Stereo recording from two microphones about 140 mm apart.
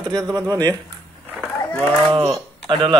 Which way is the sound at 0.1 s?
25° right (ahead or behind).